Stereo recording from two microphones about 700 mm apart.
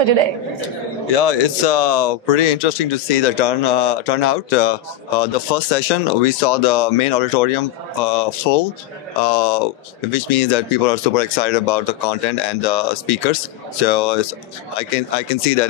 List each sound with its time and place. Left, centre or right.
0.0 s a woman's voice: right
1.1 s speech: left